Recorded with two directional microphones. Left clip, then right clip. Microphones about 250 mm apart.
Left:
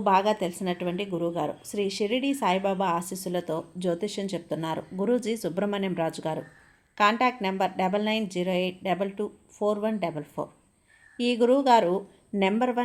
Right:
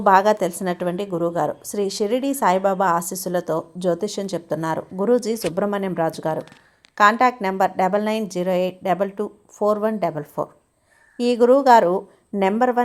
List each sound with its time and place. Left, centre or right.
0.0 s a woman's voice: right